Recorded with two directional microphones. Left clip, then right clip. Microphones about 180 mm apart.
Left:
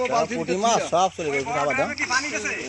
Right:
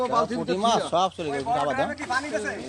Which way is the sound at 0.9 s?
50° left (ahead or behind).